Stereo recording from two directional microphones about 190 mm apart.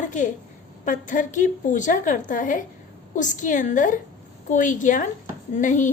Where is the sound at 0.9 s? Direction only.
40° left (ahead or behind).